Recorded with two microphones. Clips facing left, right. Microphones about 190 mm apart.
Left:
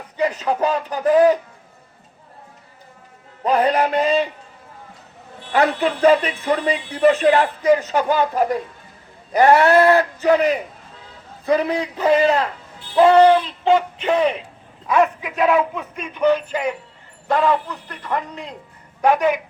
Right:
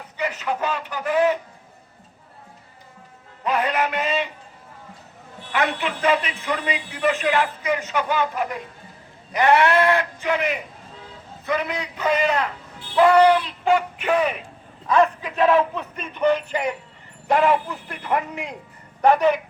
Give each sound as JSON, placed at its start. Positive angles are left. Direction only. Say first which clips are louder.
{"t": 0.2, "sound": "speech", "louder": "left 6 dB", "side_deg": 35}
{"t": 3.4, "sound": "speech", "louder": "left 5 dB", "side_deg": 35}
{"t": 5.5, "sound": "speech", "louder": "left 6 dB", "side_deg": 40}
{"t": 13.0, "sound": "a sound", "louder": "left 3 dB", "side_deg": 25}
{"t": 14.8, "sound": "a man's voice", "louder": "left 1 dB", "side_deg": 10}
{"t": 17.3, "sound": "speech", "louder": "even", "side_deg": -15}
{"t": 19.0, "sound": "a man's voice", "louder": "even", "side_deg": 10}